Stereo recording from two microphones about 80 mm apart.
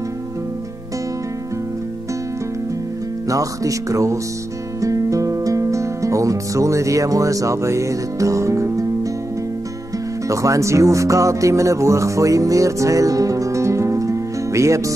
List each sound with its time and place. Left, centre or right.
3.3 s speech: right
10.2 s speech: right